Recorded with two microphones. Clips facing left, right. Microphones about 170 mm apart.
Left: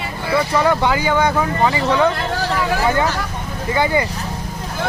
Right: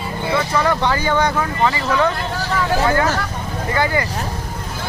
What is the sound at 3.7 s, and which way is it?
Speech, 20° left (ahead or behind).